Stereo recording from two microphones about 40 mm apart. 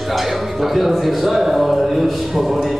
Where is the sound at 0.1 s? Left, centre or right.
Centre.